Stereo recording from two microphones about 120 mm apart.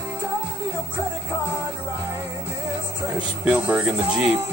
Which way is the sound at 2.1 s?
25° right (ahead or behind).